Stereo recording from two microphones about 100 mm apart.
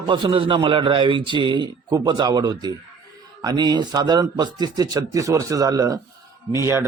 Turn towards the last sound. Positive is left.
turn(degrees=-30)  # may be behind; listen again after turning